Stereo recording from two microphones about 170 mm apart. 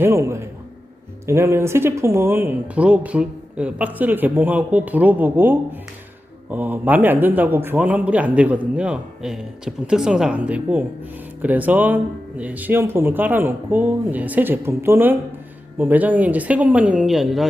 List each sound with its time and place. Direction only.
0.0 s a man's voice: 15° right (ahead or behind)